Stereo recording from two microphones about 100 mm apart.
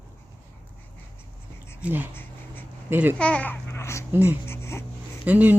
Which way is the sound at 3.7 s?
30° left (ahead or behind).